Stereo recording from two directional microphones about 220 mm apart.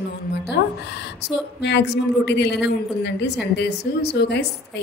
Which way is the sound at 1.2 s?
50° left (ahead or behind).